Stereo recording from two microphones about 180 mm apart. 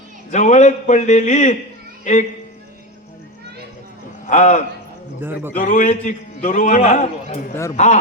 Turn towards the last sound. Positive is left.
turn(degrees=40)  # may be behind; listen again after turning